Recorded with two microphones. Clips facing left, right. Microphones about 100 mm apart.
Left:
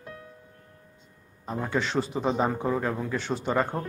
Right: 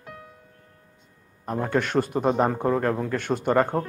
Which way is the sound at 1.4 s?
55° right (ahead or behind).